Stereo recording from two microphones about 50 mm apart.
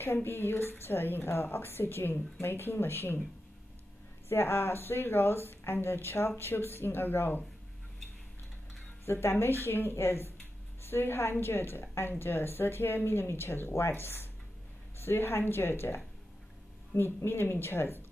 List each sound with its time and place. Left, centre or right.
0.0 s a woman's voice: left
4.3 s a woman's voice: left
9.0 s a woman's voice: left